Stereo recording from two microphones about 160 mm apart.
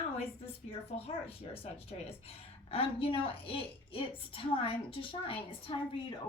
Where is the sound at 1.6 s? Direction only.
35° left (ahead or behind).